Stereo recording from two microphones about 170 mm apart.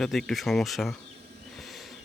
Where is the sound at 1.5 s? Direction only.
Centre (ahead or behind).